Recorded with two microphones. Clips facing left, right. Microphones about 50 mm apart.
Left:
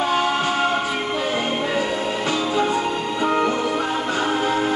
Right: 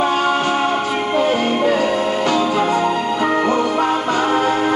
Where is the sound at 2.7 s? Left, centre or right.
Right.